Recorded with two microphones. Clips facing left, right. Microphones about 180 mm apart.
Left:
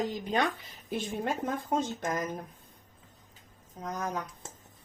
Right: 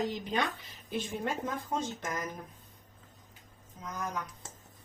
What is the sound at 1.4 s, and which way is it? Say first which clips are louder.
Speech: left 4 dB; 50° left (ahead or behind).